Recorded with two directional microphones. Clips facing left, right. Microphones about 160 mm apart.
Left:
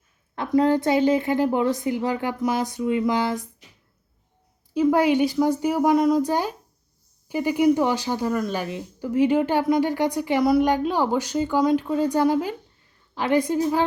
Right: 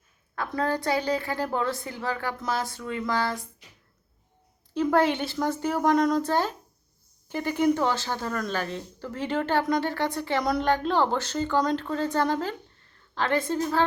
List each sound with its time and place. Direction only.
0.3 s speech: 20° left (ahead or behind)
4.7 s speech: 10° left (ahead or behind)